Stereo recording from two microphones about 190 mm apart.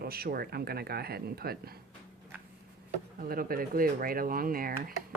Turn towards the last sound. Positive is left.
turn(degrees=-50)  # may be behind; listen again after turning